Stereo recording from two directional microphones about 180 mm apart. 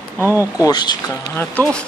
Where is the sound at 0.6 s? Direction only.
25° left (ahead or behind).